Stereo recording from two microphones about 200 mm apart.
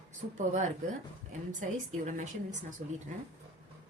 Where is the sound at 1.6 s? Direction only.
40° right (ahead or behind).